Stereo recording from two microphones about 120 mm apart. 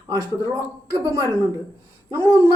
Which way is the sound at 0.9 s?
25° right (ahead or behind).